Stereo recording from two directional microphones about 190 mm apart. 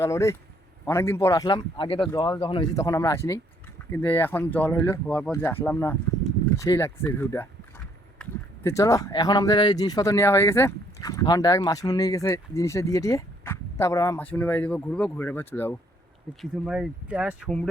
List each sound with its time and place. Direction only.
0.0 s speech: 15° left (ahead or behind)
16.4 s speech: centre (ahead or behind)